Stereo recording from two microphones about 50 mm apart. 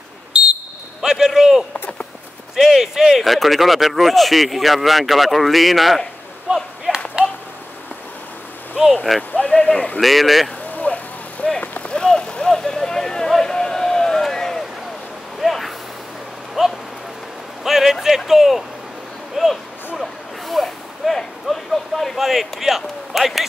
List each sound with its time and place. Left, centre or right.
1.0 s a sound: centre
2.5 s speech: centre
6.5 s whip: centre
6.9 s a sound: right
9.1 s speech: centre
9.5 s a man's voice: centre
9.9 s speech: centre
10.9 s vehicle: left
11.9 s vehicle: centre
16.6 s rain: centre
17.6 s a sound: centre
18.0 s speech: centre
19.3 s a sound: centre